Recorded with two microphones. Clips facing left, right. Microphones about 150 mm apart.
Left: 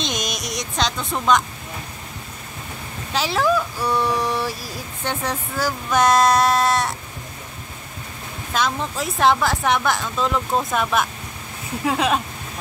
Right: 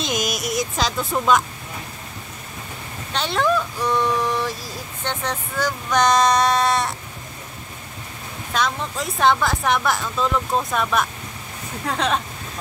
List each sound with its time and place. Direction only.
0.0 s speech: 5° right (ahead or behind)
3.1 s speech: 5° left (ahead or behind)
8.5 s speech: centre (ahead or behind)